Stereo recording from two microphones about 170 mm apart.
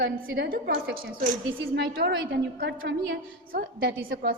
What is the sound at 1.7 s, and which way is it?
A woman's voice, 65° right (ahead or behind).